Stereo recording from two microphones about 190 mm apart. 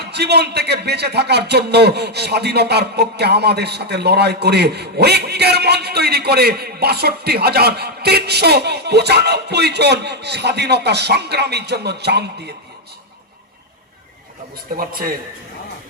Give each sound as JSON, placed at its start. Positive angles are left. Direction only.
{"t": 0.0, "sound": "a man's voice", "side_deg": -60}
{"t": 14.8, "sound": "a man's voice", "side_deg": -50}